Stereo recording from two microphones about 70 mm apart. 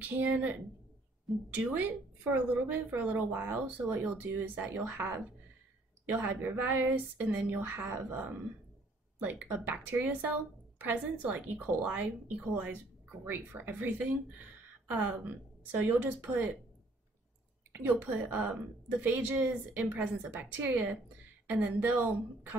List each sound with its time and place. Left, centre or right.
0.0 s a woman's voice: right
17.7 s a woman's voice: right